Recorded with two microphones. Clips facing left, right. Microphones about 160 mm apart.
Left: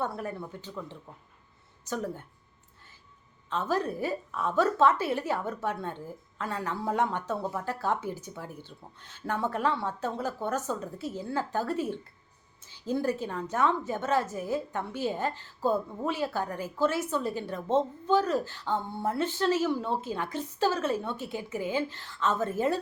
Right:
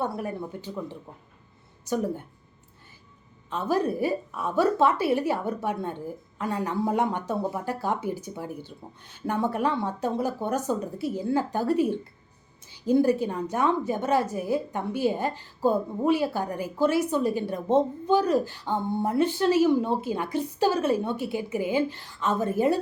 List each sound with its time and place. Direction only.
0.0 s a woman's voice: 10° right (ahead or behind)
3.5 s a woman's voice: 10° right (ahead or behind)